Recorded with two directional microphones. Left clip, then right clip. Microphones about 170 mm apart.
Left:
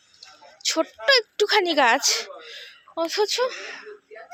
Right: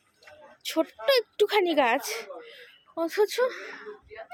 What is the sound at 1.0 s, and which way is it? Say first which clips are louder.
Speech: left 4 dB; 10° right (ahead or behind).